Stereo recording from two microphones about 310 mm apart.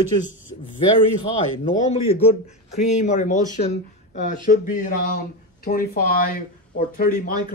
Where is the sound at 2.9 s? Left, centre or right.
Left.